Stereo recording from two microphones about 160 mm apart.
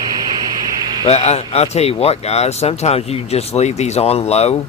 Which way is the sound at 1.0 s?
40° left (ahead or behind).